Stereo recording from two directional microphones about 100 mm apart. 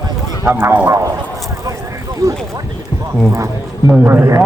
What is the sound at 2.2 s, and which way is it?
A man's voice, 30° right (ahead or behind).